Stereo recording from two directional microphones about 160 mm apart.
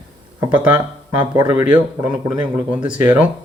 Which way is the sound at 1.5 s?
10° right (ahead or behind).